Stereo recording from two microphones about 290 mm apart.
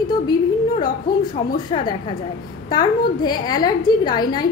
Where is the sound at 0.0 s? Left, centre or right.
Centre.